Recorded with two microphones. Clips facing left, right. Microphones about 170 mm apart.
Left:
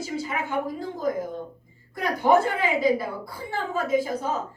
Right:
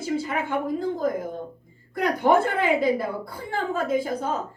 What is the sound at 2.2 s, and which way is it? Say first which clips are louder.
A woman's voice: even; 55° right (ahead or behind).